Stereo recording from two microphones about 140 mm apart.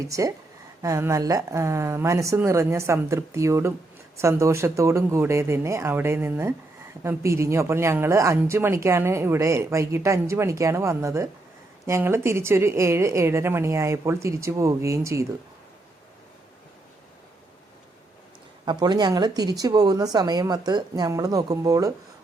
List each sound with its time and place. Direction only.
0.1 s speech: 25° right (ahead or behind)
18.6 s speech: 30° right (ahead or behind)